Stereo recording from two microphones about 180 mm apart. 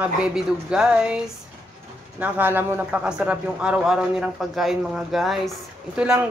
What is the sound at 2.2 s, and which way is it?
A man's voice, 10° right (ahead or behind).